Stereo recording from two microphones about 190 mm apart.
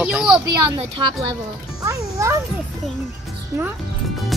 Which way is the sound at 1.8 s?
15° right (ahead or behind).